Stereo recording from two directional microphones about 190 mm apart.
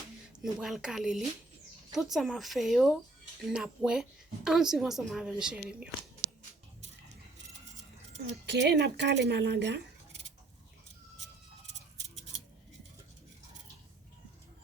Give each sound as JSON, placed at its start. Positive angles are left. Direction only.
{"t": 0.4, "sound": "a woman's voice", "side_deg": 0}
{"t": 8.4, "sound": "a woman's voice", "side_deg": -65}